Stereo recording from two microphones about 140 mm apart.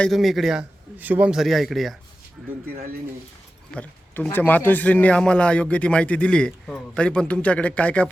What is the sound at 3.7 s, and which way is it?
A man's voice, 15° left (ahead or behind).